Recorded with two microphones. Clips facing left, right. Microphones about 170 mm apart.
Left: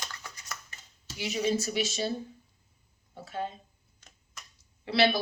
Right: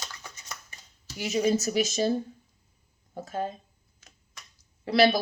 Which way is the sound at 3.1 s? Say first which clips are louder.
Right 4 dB; 40° right (ahead or behind).